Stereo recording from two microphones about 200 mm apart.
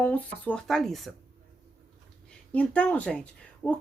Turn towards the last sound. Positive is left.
turn(degrees=5)  # may be behind; listen again after turning